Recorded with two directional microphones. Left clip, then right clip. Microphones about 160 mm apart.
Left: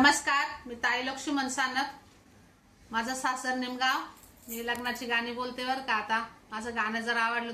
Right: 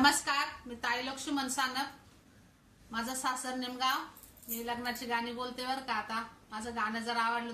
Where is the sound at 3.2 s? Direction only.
15° right (ahead or behind).